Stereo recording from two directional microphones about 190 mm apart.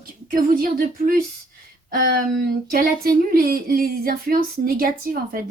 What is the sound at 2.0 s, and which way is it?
Speech, 50° right (ahead or behind).